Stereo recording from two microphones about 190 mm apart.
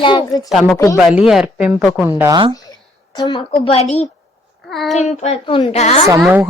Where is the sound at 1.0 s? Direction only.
Centre (ahead or behind).